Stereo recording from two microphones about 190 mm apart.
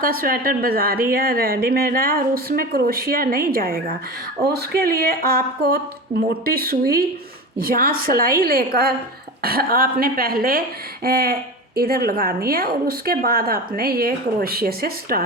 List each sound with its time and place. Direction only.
0.0 s speech: 50° right (ahead or behind)